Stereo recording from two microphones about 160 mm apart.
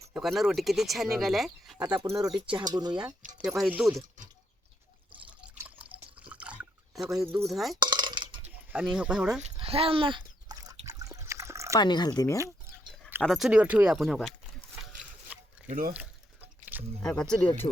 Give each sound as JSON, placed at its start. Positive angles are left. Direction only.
{"t": 0.1, "sound": "speech", "side_deg": 0}
{"t": 1.8, "sound": "speech", "side_deg": -20}
{"t": 3.3, "sound": "speech", "side_deg": 0}
{"t": 5.5, "sound": "drip", "side_deg": -10}
{"t": 7.4, "sound": "speech", "side_deg": 0}
{"t": 7.8, "sound": "a sound", "side_deg": -30}
{"t": 8.7, "sound": "speech", "side_deg": -5}
{"t": 9.4, "sound": "a sound", "side_deg": -40}
{"t": 10.8, "sound": "water", "side_deg": -20}
{"t": 11.8, "sound": "speech", "side_deg": 25}
{"t": 13.2, "sound": "speech", "side_deg": 0}
{"t": 15.3, "sound": "zipper", "side_deg": -10}
{"t": 15.9, "sound": "a sound", "side_deg": -10}
{"t": 17.0, "sound": "speech", "side_deg": 5}